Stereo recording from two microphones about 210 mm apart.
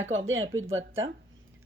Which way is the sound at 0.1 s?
70° right (ahead or behind).